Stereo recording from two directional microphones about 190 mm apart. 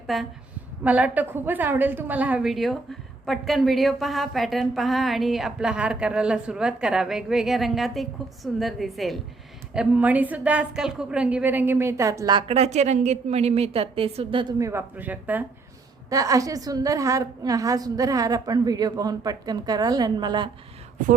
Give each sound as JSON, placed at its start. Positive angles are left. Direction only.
{"t": 0.1, "sound": "a woman's voice", "side_deg": 0}
{"t": 14.6, "sound": "a woman's voice", "side_deg": -15}